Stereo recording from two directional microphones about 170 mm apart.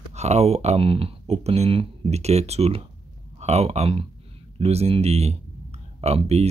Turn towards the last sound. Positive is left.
turn(degrees=-40)  # may be behind; listen again after turning